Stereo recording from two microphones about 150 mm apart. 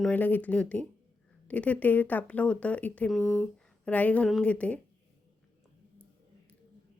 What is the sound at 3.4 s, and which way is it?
A woman's voice, 10° left (ahead or behind).